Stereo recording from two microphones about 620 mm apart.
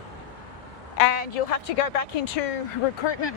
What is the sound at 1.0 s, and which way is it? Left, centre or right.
A woman's voice, left.